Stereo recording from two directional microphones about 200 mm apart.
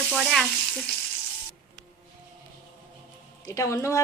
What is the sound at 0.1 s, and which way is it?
Stir, centre (ahead or behind).